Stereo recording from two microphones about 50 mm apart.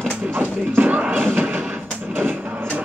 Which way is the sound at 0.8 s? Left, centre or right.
Right.